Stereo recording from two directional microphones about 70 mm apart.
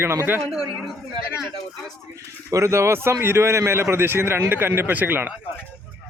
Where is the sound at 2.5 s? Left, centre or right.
Right.